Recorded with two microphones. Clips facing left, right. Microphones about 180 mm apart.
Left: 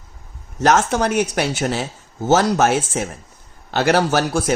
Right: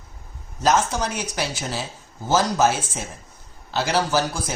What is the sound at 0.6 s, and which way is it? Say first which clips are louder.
Speech: left 4 dB; 70° left (ahead or behind).